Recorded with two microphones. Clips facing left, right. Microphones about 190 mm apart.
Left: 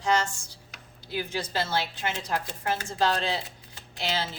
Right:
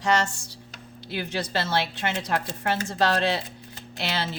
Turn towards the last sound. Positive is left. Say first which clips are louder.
# right 1 dB
turn(degrees=-65)  # may be behind; listen again after turning